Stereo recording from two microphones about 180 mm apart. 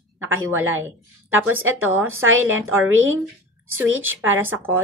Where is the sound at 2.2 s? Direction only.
90° right.